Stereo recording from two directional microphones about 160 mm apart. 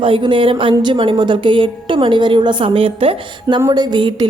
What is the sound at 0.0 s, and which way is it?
A woman's voice, 30° right (ahead or behind).